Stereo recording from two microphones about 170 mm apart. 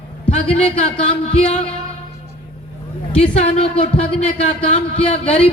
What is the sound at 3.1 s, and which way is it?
Speech, 35° left (ahead or behind).